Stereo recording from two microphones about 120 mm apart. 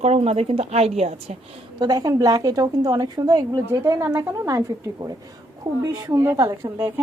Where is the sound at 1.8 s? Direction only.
30° right (ahead or behind).